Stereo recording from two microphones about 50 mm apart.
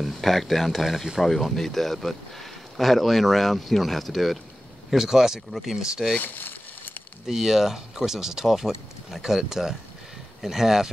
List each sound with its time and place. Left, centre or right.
0.0 s speech: centre
1.2 s speech: centre
6.2 s a sound: left
7.2 s speech: centre